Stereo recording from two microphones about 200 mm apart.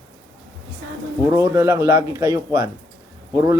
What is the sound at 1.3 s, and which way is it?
Speech, 15° right (ahead or behind).